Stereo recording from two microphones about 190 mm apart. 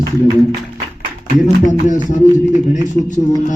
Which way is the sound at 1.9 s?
40° left (ahead or behind).